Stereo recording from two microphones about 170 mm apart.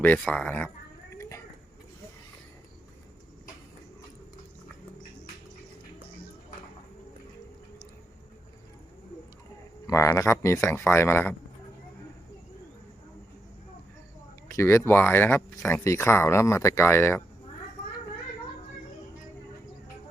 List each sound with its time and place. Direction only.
0.0 s speech: 10° left (ahead or behind)
9.8 s a man's voice: 15° left (ahead or behind)
14.5 s speech: 15° left (ahead or behind)